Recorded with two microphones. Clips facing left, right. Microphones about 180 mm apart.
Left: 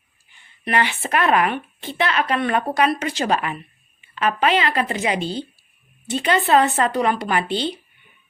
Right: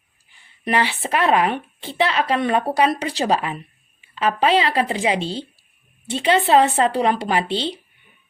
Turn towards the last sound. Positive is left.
turn(degrees=-30)  # may be behind; listen again after turning